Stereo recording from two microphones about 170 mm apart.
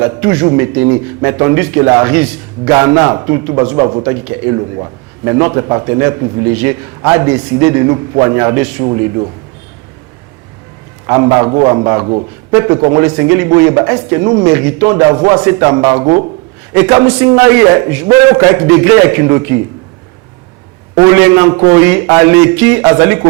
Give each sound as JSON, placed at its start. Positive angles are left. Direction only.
{"t": 0.0, "sound": "a man's voice", "side_deg": -15}
{"t": 8.8, "sound": "speech", "side_deg": -30}
{"t": 11.0, "sound": "a man's voice", "side_deg": -20}
{"t": 20.9, "sound": "a man's voice", "side_deg": -20}